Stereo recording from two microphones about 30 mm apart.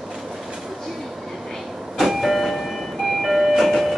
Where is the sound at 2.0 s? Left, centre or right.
Centre.